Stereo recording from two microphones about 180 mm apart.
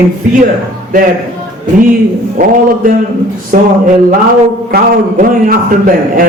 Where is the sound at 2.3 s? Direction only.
50° right (ahead or behind).